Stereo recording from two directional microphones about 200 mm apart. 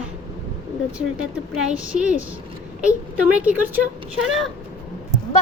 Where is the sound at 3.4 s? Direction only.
5° right (ahead or behind).